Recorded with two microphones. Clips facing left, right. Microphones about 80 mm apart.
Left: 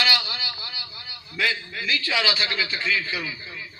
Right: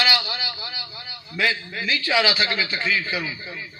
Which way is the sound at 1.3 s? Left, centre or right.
Right.